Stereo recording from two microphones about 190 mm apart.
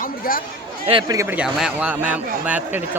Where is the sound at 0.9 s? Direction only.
25° right (ahead or behind).